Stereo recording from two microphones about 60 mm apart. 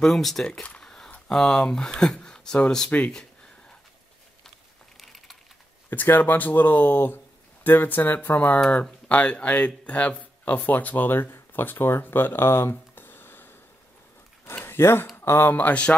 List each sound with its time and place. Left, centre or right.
0.0 s speech: centre
0.6 s speech: centre
0.8 s a sound: centre
1.3 s speech: centre
5.0 s typing: centre
5.9 s speech: left
14.6 s a sound: left
15.1 s speech: left
15.5 s speech: left